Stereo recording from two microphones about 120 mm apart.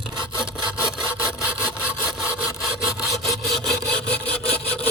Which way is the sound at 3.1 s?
25° left (ahead or behind).